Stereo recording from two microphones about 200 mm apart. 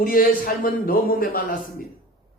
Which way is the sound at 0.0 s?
45° left (ahead or behind).